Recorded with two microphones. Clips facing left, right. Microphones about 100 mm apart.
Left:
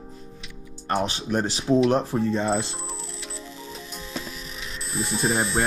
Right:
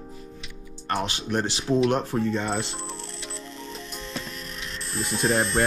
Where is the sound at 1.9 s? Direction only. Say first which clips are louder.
Left 2 dB; 35° left (ahead or behind).